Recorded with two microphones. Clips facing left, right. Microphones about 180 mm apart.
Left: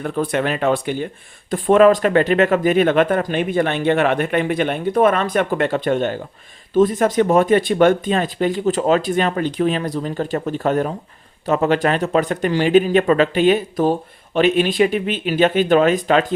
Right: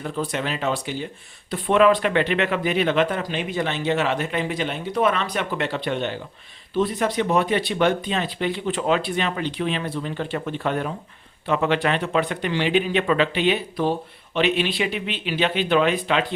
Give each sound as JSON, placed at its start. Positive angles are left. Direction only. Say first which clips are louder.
{"t": 0.0, "sound": "speech", "louder": "left 6 dB", "side_deg": 55}